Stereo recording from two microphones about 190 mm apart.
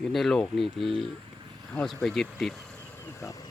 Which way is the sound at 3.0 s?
15° left (ahead or behind).